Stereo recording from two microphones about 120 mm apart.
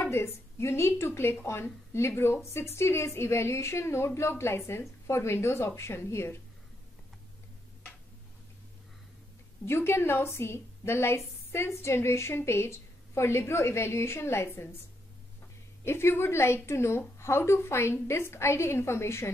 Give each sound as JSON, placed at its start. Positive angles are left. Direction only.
{"t": 0.0, "sound": "speech", "side_deg": 20}
{"t": 9.7, "sound": "speech", "side_deg": 20}
{"t": 15.8, "sound": "speech", "side_deg": 20}